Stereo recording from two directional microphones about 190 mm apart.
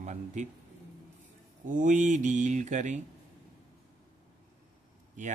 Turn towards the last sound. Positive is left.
turn(degrees=-40)  # may be behind; listen again after turning